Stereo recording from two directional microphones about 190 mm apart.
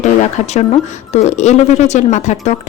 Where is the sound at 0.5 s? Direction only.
35° left (ahead or behind).